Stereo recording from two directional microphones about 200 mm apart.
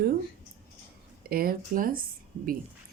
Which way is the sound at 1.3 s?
50° right (ahead or behind).